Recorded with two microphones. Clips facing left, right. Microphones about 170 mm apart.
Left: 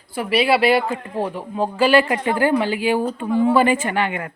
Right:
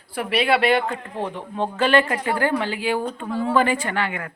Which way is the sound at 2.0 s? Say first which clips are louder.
Left 3 dB; 20° left (ahead or behind).